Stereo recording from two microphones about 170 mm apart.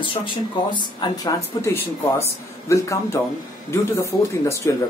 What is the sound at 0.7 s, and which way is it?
Speech, 25° left (ahead or behind).